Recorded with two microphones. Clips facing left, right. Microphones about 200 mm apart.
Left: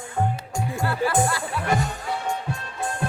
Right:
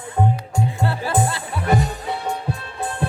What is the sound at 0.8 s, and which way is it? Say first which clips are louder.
Music: left 1 dB; 30° right (ahead or behind).